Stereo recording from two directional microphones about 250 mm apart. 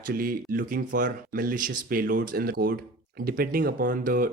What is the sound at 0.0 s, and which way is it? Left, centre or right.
Speech, right.